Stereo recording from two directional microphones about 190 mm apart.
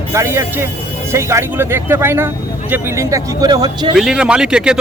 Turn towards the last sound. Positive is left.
turn(degrees=-5)  # may be behind; listen again after turning